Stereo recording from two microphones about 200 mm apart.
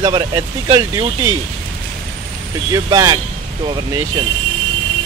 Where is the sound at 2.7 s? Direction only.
20° right (ahead or behind).